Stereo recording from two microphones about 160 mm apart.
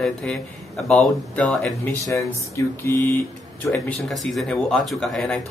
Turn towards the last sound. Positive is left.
turn(degrees=0)  # may be behind; listen again after turning